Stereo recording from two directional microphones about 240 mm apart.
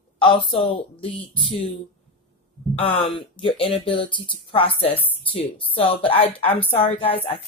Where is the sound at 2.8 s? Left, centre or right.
Left.